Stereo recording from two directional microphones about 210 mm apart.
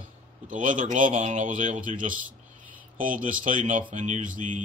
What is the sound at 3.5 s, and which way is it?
Speech, 40° right (ahead or behind).